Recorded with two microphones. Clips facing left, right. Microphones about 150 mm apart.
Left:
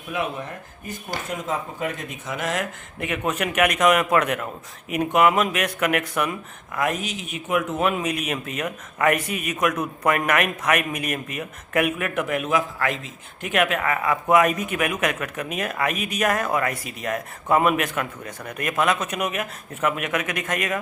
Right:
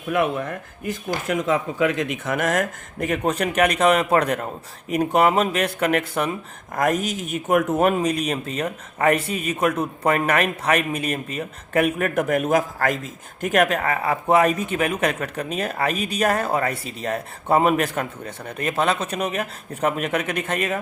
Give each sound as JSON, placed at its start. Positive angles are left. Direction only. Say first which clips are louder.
{"t": 0.0, "sound": "speech", "louder": "right 6 dB", "side_deg": -60}
{"t": 6.7, "sound": "speech", "louder": "right 4 dB", "side_deg": -45}